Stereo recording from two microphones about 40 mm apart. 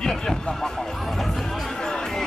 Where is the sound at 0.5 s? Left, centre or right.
Centre.